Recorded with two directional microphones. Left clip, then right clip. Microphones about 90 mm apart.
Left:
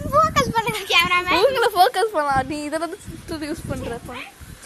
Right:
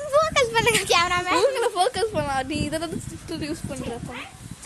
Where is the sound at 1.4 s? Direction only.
25° left (ahead or behind).